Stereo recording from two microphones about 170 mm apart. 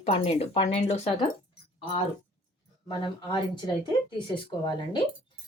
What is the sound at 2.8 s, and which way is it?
Speech, 30° left (ahead or behind).